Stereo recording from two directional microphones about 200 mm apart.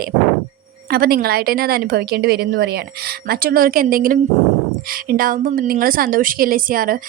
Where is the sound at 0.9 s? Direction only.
50° right (ahead or behind).